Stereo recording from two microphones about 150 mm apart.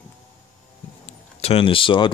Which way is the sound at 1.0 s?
40° left (ahead or behind).